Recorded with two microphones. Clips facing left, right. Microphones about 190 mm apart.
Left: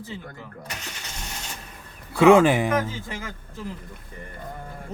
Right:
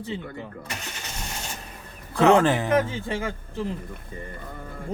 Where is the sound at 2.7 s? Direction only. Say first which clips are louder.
Right 3 dB; 30° right (ahead or behind).